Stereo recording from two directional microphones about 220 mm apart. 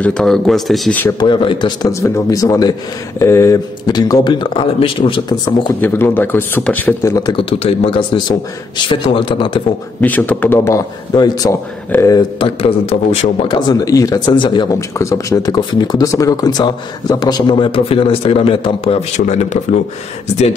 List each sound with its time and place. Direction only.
0.0 s a man's voice: centre (ahead or behind)
1.2 s a man's voice: 20° left (ahead or behind)
9.9 s a man's voice: 5° left (ahead or behind); by 19.8 s 30° left (ahead or behind)